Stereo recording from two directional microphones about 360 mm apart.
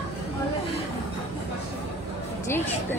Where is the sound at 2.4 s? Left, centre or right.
Centre.